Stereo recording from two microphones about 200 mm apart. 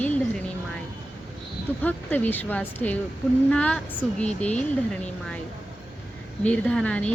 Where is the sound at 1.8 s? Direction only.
10° left (ahead or behind).